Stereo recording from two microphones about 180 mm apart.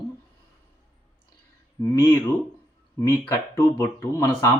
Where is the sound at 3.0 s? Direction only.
15° left (ahead or behind).